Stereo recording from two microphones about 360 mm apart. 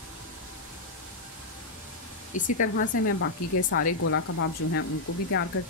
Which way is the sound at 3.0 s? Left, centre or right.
Left.